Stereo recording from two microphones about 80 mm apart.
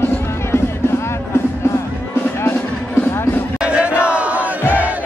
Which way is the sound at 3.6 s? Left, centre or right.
Centre.